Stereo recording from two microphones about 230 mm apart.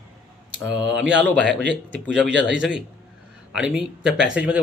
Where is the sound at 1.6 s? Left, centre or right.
Right.